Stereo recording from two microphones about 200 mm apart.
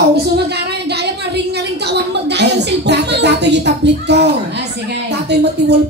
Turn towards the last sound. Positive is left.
turn(degrees=-55)  # may be behind; listen again after turning